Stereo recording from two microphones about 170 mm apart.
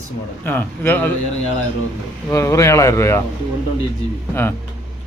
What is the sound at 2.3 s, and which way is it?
Speech, 20° left (ahead or behind).